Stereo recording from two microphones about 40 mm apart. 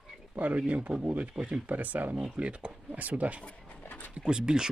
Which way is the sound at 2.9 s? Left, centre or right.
Right.